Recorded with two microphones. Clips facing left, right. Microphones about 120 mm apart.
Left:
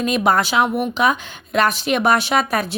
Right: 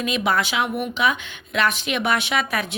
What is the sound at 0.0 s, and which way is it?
A woman's voice, 45° left (ahead or behind).